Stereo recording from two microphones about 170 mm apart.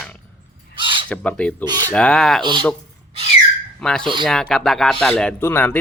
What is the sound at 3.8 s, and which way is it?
Speech, 5° left (ahead or behind).